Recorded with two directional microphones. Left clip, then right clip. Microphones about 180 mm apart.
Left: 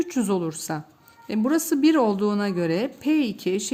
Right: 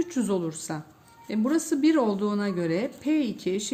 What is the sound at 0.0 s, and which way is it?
Speech, 40° left (ahead or behind).